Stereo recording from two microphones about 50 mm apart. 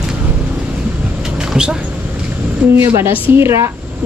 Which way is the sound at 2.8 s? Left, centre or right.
Right.